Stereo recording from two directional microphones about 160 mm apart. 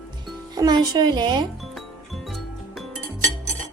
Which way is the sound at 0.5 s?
25° right (ahead or behind).